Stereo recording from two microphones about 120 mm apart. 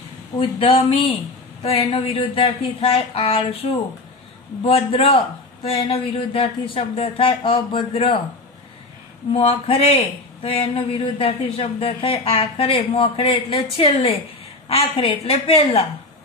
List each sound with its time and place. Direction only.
0.4 s a man's voice: 50° left (ahead or behind)
4.6 s a man's voice: 50° left (ahead or behind)
9.5 s a man's voice: 55° left (ahead or behind)